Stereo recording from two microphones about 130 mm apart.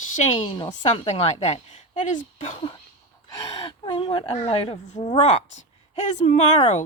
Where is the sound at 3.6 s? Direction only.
40° left (ahead or behind).